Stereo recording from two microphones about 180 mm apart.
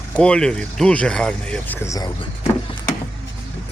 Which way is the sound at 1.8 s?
20° left (ahead or behind).